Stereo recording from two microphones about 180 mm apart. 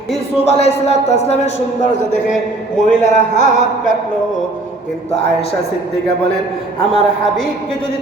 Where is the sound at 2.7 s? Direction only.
40° left (ahead or behind).